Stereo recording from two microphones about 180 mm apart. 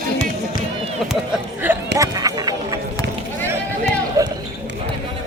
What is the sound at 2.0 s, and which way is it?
Run, 20° right (ahead or behind).